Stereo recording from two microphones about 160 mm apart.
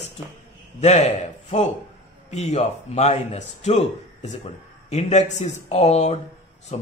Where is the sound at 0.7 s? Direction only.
45° left (ahead or behind).